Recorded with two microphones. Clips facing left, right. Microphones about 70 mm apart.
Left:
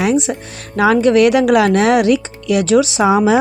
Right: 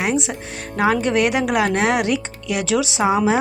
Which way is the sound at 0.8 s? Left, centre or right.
Left.